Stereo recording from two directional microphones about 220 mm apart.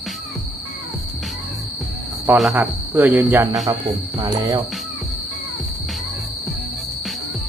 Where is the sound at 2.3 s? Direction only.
5° right (ahead or behind).